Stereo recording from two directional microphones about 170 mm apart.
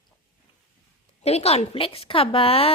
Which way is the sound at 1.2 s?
40° left (ahead or behind).